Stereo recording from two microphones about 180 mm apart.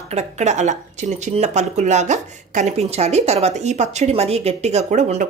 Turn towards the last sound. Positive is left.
turn(degrees=-40)  # may be behind; listen again after turning